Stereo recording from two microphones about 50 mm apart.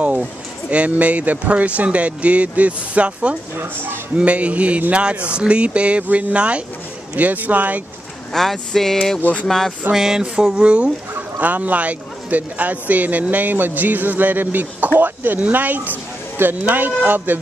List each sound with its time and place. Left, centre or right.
0.7 s speech: right
3.5 s speech: right
4.2 s a man's voice: right
8.3 s speech: centre
9.9 s a sound: centre
10.6 s speech: right
11.3 s a man's voice: right